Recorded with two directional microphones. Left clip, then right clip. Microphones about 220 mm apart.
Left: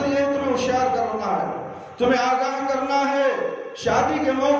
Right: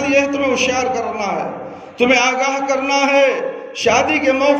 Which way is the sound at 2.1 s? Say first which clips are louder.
Right 5 dB; 35° right (ahead or behind).